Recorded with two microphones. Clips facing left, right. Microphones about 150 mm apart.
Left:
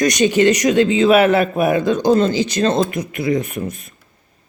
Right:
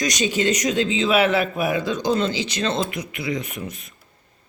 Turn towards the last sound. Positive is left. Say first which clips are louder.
# left 7 dB
turn(degrees=45)  # may be behind; listen again after turning